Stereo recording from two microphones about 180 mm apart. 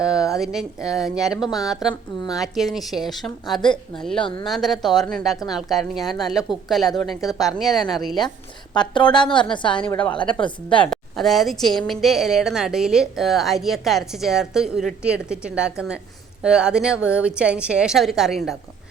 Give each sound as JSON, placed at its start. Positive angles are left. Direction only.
{"t": 0.0, "sound": "a sound", "side_deg": -5}
{"t": 0.3, "sound": "a woman's voice", "side_deg": 0}
{"t": 4.2, "sound": "a woman's voice", "side_deg": 30}
{"t": 4.4, "sound": "a woman's voice", "side_deg": 0}
{"t": 8.7, "sound": "a woman's voice", "side_deg": 25}
{"t": 10.8, "sound": "a woman's voice", "side_deg": 0}